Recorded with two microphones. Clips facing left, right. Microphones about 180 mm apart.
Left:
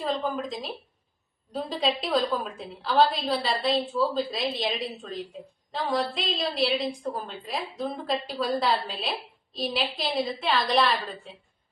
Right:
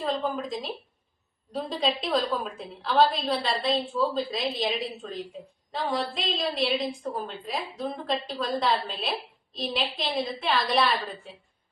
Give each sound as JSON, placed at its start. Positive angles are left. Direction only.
{"t": 0.0, "sound": "a woman's voice", "side_deg": 0}